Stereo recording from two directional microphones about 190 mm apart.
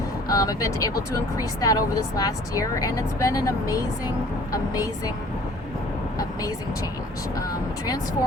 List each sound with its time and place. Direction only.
0.3 s speech: 20° left (ahead or behind)
7.3 s speech: 20° left (ahead or behind)